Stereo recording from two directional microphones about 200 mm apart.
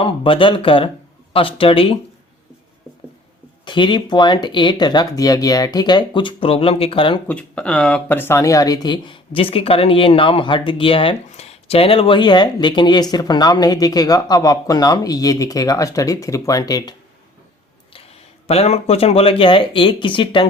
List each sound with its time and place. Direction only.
0.0 s speech: 25° left (ahead or behind)
3.7 s speech: 25° left (ahead or behind)
7.3 s speech: 5° left (ahead or behind)
18.4 s speech: 30° left (ahead or behind)